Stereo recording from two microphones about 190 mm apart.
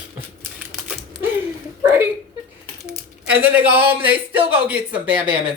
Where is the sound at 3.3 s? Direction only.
10° right (ahead or behind).